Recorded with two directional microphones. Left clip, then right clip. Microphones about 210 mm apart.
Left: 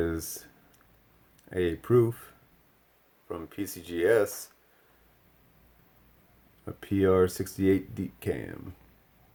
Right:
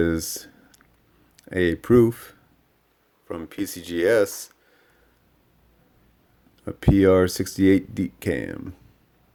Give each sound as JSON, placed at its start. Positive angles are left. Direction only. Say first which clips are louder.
{"t": 0.0, "sound": "speech", "louder": "right 8 dB", "side_deg": -35}
{"t": 6.7, "sound": "speech", "louder": "right 8 dB", "side_deg": -40}